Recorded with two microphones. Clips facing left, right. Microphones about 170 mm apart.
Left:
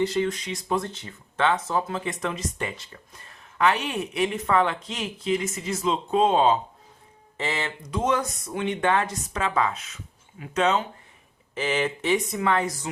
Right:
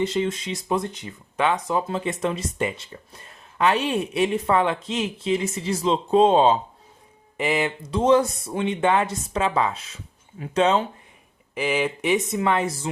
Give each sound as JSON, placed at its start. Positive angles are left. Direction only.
{"t": 0.0, "sound": "speech", "side_deg": -20}
{"t": 7.3, "sound": "speech", "side_deg": -15}
{"t": 7.8, "sound": "speech", "side_deg": -30}
{"t": 11.5, "sound": "speech", "side_deg": -10}
{"t": 12.1, "sound": "speech", "side_deg": -20}